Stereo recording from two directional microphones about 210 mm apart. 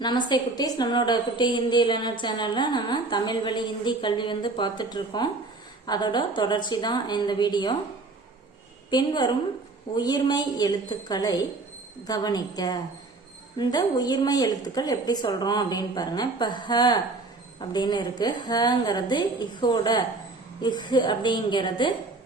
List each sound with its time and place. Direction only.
0.0 s a woman's voice: 20° left (ahead or behind)
8.9 s a woman's voice: 20° left (ahead or behind)